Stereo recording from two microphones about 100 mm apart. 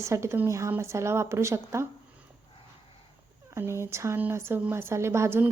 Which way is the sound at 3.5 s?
25° right (ahead or behind).